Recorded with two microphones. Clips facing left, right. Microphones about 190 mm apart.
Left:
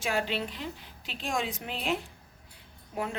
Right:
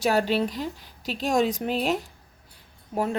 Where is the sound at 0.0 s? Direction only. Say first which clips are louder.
Right 8 dB; 40° right (ahead or behind).